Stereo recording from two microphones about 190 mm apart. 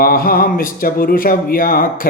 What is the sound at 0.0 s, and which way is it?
Speech, 50° left (ahead or behind).